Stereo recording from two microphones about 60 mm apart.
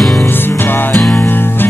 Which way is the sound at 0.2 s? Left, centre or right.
Left.